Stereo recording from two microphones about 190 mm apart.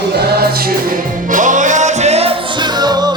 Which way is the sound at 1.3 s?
40° right (ahead or behind).